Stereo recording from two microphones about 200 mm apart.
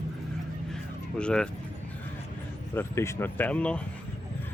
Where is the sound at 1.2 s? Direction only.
5° left (ahead or behind).